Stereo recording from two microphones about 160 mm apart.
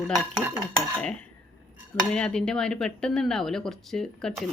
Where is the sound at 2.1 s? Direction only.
5° left (ahead or behind).